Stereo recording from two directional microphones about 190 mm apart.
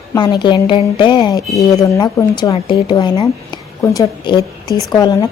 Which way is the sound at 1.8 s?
15° left (ahead or behind).